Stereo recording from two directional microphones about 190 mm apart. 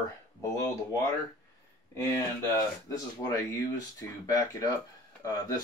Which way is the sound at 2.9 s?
15° left (ahead or behind).